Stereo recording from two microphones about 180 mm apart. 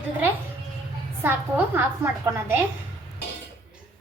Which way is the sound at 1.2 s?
10° right (ahead or behind).